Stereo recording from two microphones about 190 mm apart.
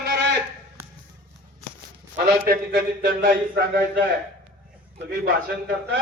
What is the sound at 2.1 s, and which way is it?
A man's voice, 55° right (ahead or behind).